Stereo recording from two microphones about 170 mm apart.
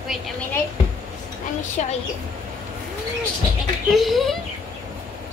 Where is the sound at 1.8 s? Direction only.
45° left (ahead or behind).